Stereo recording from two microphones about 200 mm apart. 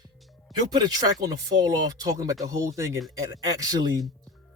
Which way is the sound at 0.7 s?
20° right (ahead or behind).